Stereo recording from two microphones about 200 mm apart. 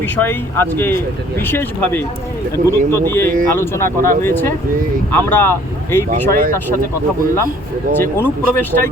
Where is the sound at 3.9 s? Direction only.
45° right (ahead or behind).